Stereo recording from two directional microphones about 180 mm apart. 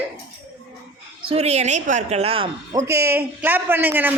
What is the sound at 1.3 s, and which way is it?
A man's voice, 35° right (ahead or behind).